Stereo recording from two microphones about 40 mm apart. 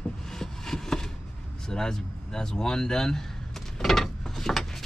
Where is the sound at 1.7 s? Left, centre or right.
Centre.